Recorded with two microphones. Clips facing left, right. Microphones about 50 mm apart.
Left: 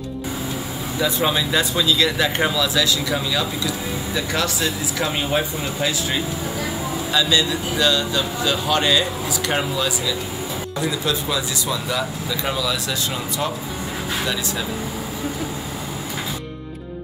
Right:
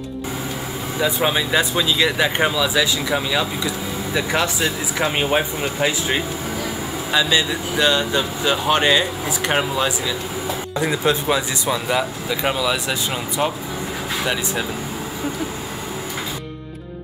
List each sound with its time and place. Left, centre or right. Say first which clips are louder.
0.9 s speech: right 1 dB; centre